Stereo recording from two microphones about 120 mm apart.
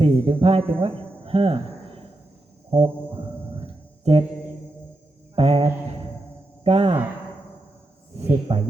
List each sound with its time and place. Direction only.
0.0 s speech: 50° right (ahead or behind)
2.6 s music: 50° right (ahead or behind)
3.6 s a sound: 50° right (ahead or behind)
5.3 s mantra: 50° right (ahead or behind)
6.7 s speech: 55° right (ahead or behind)
8.2 s speech: 60° right (ahead or behind)